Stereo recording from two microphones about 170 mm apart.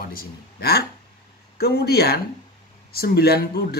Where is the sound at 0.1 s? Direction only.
60° left (ahead or behind).